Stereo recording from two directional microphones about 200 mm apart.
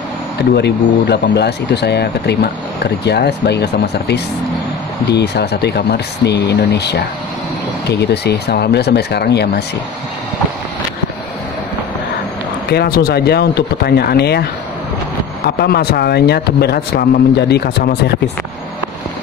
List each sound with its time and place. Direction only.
0.6 s speech: 55° left (ahead or behind)
12.6 s speech: 50° left (ahead or behind)